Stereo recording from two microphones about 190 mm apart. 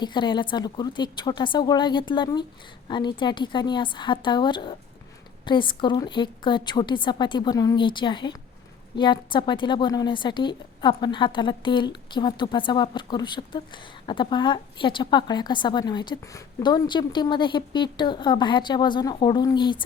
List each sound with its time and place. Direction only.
0.0 s a woman's voice: 25° left (ahead or behind)